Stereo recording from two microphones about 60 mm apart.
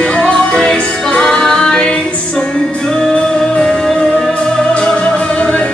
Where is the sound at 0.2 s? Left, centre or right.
Centre.